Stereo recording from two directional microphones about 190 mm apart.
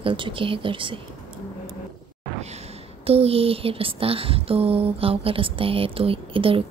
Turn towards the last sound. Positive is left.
turn(degrees=-30)  # may be behind; listen again after turning